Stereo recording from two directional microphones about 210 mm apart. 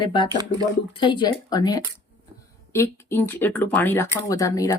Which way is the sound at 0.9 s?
25° left (ahead or behind).